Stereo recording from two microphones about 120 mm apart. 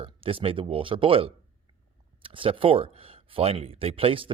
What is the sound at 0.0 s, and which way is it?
Speech, 50° right (ahead or behind).